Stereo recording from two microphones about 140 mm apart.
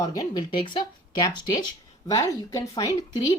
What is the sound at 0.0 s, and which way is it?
Speech, 30° left (ahead or behind).